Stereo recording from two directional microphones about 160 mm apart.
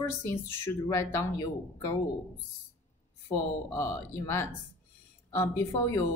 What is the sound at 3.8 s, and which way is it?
Speech, 15° left (ahead or behind).